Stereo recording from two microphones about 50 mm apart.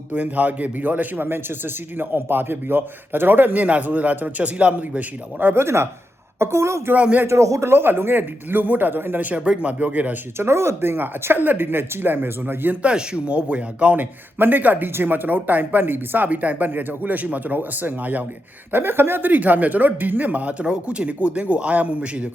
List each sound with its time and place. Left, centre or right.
0.1 s a man's voice: right
5.5 s a woman's voice: right
6.9 s speech: right
7.3 s speech: right
7.7 s a man's voice: right
9.4 s speech: right
10.3 s speech: right
12.8 s a man's voice: right
18.7 s speech: right